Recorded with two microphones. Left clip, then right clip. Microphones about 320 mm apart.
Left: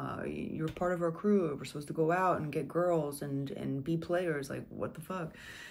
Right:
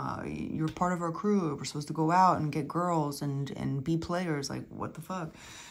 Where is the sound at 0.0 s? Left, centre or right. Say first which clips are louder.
Right 2 dB; centre.